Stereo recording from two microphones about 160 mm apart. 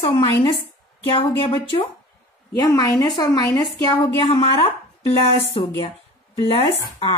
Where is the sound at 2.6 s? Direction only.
20° left (ahead or behind).